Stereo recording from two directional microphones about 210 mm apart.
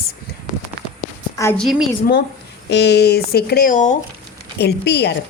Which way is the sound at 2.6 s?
55° left (ahead or behind).